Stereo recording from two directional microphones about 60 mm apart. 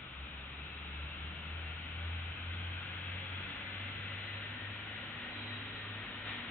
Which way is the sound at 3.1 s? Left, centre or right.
Left.